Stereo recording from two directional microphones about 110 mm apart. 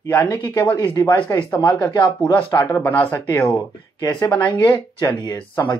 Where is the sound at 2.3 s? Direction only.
20° left (ahead or behind).